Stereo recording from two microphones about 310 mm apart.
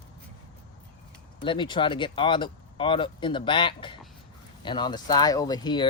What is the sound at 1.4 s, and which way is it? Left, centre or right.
Speech, centre.